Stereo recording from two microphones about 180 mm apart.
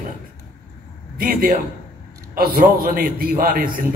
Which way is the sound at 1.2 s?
50° right (ahead or behind).